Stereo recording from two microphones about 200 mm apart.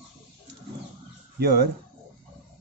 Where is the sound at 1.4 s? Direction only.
55° right (ahead or behind).